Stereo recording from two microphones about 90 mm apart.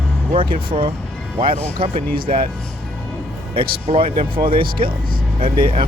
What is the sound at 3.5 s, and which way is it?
Speech, 90° right.